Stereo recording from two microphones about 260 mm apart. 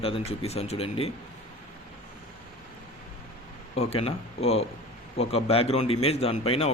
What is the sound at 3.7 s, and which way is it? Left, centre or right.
Speech, left.